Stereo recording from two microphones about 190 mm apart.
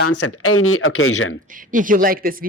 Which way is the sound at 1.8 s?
45° right (ahead or behind).